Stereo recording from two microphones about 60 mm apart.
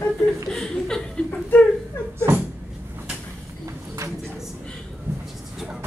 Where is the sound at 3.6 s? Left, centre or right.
Right.